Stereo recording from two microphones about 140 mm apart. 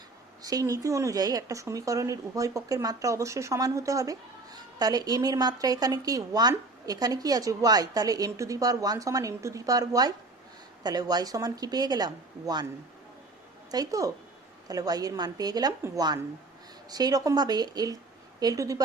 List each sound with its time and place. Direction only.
0.4 s speech: 25° right (ahead or behind)
13.7 s a woman's voice: 25° right (ahead or behind)